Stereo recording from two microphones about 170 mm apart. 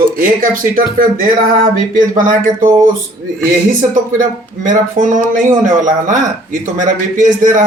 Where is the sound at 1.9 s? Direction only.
55° right (ahead or behind).